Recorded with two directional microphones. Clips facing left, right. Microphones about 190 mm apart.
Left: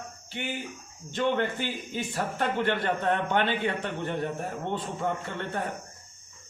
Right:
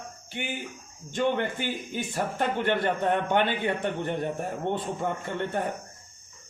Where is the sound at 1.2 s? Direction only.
15° right (ahead or behind).